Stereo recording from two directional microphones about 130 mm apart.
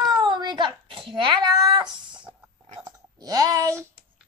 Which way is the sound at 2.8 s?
30° right (ahead or behind).